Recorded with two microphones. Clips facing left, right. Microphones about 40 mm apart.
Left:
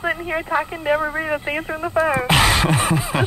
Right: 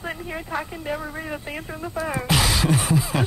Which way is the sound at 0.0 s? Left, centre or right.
Left.